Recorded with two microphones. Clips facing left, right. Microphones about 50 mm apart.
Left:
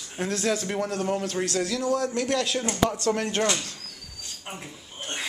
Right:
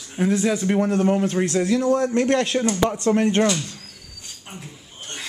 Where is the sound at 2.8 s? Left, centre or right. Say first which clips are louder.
Right 4 dB; right.